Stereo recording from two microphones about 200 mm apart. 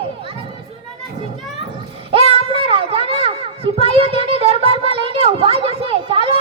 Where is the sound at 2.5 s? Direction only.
25° right (ahead or behind).